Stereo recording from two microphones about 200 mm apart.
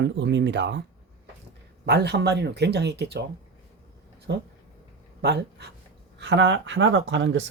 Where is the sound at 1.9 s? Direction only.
55° right (ahead or behind).